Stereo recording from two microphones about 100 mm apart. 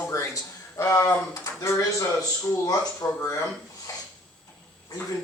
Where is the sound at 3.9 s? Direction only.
35° left (ahead or behind).